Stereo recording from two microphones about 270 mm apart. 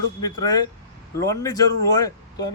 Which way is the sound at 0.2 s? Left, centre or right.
Centre.